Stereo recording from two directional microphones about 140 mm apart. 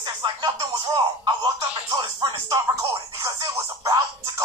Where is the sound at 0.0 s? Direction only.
30° right (ahead or behind).